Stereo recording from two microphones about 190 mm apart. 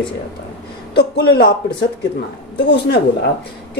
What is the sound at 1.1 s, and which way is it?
Speech, 60° left (ahead or behind).